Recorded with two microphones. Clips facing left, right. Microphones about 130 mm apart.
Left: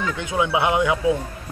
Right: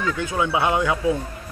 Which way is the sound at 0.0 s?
20° left (ahead or behind).